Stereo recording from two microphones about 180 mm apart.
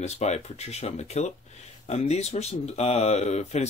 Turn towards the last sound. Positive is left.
turn(degrees=40)  # may be behind; listen again after turning